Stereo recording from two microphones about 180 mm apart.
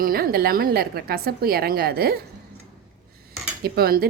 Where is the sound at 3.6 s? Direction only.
60° right (ahead or behind).